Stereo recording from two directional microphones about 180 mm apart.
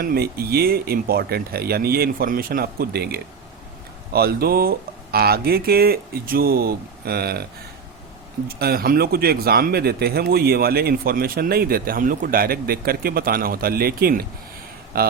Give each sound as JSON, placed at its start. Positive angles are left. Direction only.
{"t": 0.0, "sound": "speech", "side_deg": -55}
{"t": 8.4, "sound": "speech", "side_deg": -60}